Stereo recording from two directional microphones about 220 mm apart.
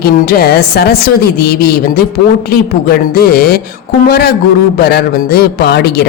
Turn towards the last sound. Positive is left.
turn(degrees=45)  # may be behind; listen again after turning